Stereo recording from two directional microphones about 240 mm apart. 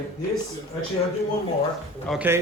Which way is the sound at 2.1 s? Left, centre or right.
Centre.